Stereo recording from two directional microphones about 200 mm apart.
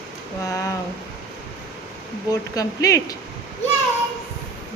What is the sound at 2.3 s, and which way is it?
Speech, 15° left (ahead or behind).